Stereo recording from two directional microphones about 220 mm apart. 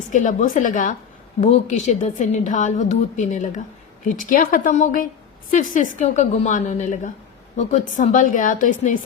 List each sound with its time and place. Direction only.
0.1 s a woman's voice: 35° left (ahead or behind)